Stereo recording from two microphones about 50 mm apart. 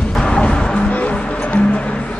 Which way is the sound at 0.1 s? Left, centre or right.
Centre.